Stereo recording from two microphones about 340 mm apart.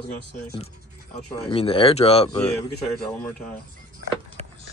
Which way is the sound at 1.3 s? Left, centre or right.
Centre.